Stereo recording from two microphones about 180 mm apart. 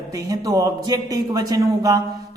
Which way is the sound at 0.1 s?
20° right (ahead or behind).